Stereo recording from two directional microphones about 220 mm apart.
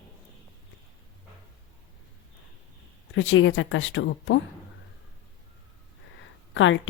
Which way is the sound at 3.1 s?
60° left (ahead or behind).